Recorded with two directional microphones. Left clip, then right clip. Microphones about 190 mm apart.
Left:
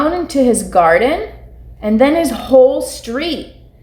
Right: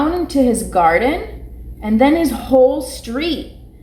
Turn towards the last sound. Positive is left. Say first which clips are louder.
# left 3 dB
turn(degrees=35)  # may be behind; listen again after turning